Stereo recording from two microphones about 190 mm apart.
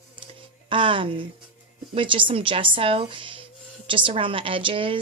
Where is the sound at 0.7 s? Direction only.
25° right (ahead or behind).